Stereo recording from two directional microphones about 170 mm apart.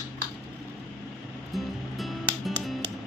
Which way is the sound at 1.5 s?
Centre (ahead or behind).